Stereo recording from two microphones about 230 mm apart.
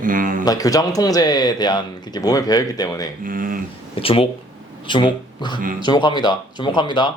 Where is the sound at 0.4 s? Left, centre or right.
Centre.